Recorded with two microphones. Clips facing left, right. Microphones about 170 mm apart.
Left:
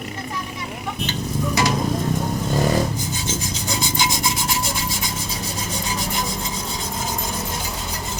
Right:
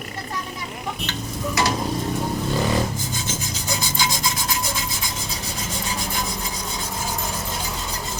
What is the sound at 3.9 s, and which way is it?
Rub, 20° left (ahead or behind).